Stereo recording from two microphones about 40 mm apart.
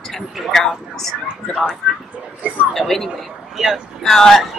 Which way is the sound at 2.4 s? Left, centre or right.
Right.